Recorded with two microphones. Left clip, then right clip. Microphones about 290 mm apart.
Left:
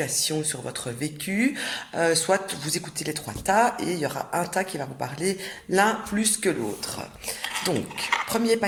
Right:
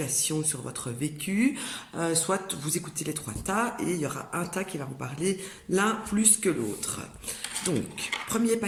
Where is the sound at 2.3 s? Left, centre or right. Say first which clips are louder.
Left 6 dB; left.